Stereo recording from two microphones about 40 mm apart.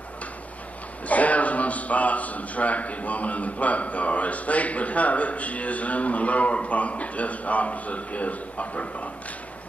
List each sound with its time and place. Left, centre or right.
1.0 s a man's voice: left